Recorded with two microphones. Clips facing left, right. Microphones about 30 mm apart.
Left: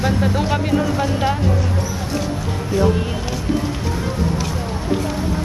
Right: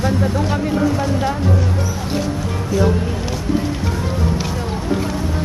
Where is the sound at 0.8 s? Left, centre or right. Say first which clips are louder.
Right 1 dB; centre.